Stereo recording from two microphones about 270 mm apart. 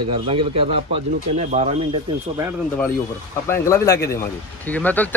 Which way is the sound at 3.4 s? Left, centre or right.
Centre.